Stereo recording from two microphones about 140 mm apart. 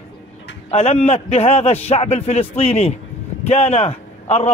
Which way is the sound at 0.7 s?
45° left (ahead or behind).